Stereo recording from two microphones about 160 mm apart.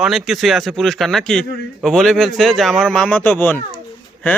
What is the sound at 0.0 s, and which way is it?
Speech, centre (ahead or behind).